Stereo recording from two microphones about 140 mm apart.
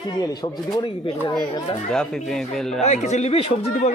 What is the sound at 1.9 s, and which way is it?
Speech, 5° left (ahead or behind).